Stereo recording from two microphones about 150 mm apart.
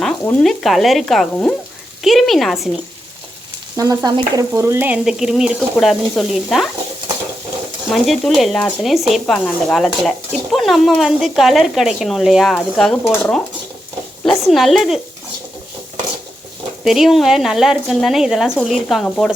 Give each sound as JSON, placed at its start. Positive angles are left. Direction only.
{"t": 0.0, "sound": "a woman's voice", "side_deg": 0}
{"t": 3.8, "sound": "stir", "side_deg": -25}
{"t": 5.0, "sound": "speech", "side_deg": -5}
{"t": 7.9, "sound": "speech", "side_deg": 0}
{"t": 14.3, "sound": "speech", "side_deg": 0}
{"t": 16.8, "sound": "speech", "side_deg": 0}